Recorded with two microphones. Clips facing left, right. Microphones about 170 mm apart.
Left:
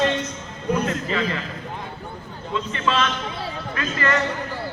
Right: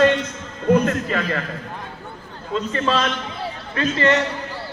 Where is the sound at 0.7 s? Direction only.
55° right (ahead or behind).